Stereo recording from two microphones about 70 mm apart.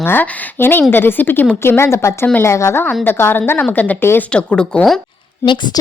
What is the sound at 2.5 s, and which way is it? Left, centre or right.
Speech, left.